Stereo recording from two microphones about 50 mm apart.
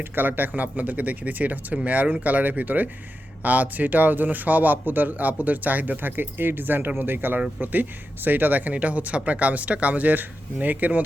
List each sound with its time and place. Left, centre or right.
0.0 s speech: right